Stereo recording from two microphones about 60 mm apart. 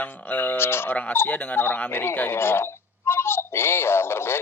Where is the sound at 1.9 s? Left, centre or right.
Left.